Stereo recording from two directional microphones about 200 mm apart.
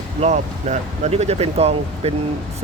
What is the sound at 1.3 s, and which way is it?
Speech, 30° right (ahead or behind).